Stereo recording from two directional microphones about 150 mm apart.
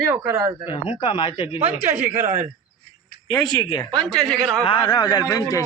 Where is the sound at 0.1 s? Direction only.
20° right (ahead or behind).